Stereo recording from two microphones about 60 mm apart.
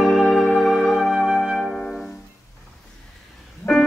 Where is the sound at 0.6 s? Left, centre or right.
Centre.